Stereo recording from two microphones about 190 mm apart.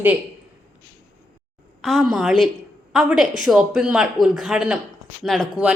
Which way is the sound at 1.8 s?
Centre (ahead or behind).